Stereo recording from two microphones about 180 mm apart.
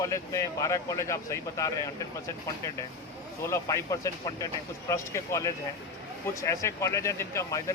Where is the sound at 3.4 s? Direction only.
15° left (ahead or behind).